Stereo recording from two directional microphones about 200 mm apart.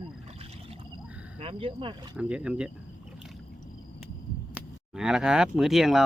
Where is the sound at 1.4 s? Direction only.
30° right (ahead or behind).